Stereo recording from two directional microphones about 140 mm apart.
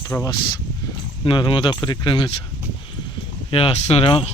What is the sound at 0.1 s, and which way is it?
Speech, 15° left (ahead or behind).